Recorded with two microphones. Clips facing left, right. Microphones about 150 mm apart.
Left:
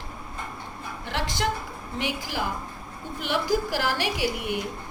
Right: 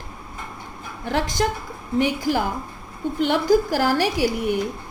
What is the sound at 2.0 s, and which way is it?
A woman's voice, 50° right (ahead or behind).